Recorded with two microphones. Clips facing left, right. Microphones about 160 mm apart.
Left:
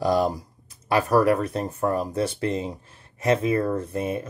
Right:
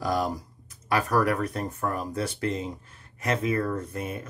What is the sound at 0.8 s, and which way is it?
Speech, 30° left (ahead or behind).